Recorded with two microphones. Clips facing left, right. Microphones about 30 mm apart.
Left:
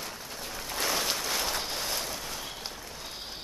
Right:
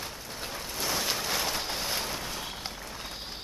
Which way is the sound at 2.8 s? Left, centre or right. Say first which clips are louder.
Right 2 dB; right.